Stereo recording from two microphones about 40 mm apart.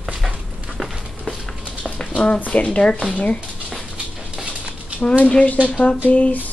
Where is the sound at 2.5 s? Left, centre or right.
Left.